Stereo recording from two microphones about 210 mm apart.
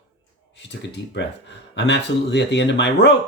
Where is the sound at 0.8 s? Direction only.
55° left (ahead or behind).